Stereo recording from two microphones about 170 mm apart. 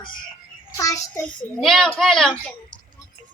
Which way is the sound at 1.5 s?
Centre (ahead or behind).